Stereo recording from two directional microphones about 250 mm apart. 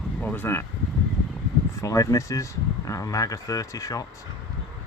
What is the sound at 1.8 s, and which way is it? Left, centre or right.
Speech, centre.